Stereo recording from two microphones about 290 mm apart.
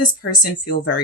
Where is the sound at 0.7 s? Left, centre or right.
Left.